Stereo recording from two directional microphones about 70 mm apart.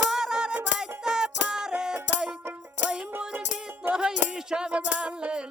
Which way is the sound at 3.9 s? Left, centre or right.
Centre.